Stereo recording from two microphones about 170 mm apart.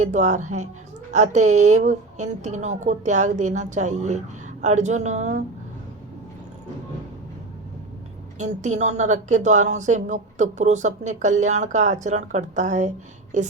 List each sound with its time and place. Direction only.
0.0 s speech: 45° right (ahead or behind)
8.4 s speech: 45° right (ahead or behind)